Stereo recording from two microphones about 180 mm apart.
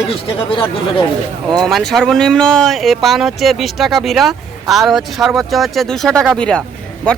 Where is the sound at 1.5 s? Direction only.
Centre (ahead or behind).